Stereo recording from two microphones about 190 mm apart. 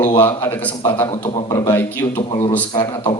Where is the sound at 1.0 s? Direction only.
25° left (ahead or behind).